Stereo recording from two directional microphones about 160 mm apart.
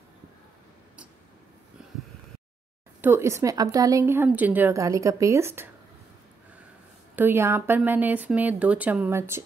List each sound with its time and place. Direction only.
3.0 s speech: 15° right (ahead or behind)
7.2 s speech: 15° right (ahead or behind)